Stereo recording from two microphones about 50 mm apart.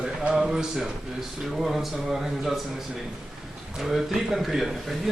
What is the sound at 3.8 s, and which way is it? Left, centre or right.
Speech, centre.